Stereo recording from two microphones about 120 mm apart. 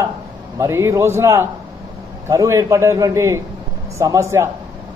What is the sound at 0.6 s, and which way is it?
A man's voice, 25° right (ahead or behind).